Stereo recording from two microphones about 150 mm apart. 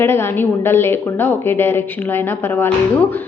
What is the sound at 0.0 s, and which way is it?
A woman's voice, 15° left (ahead or behind).